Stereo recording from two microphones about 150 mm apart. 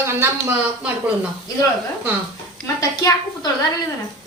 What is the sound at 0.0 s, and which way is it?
A woman's voice, 15° right (ahead or behind).